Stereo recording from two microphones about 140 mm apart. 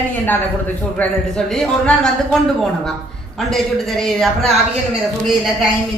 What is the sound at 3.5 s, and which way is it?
A woman's voice, centre (ahead or behind).